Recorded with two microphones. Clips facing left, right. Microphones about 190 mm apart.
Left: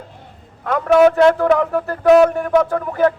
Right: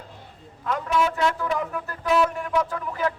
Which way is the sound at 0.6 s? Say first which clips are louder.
Left 12 dB; 60° left (ahead or behind).